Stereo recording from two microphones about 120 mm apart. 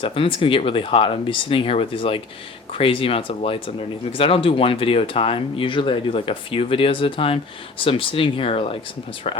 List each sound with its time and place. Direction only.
0.0 s speech: 45° left (ahead or behind)
9.2 s speech: 60° left (ahead or behind)